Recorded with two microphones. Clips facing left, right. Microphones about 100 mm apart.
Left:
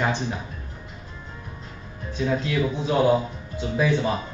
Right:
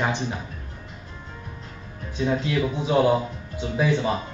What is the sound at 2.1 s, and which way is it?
Speech, 15° right (ahead or behind).